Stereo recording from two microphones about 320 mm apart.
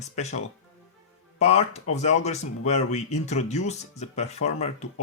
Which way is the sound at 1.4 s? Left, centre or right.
Centre.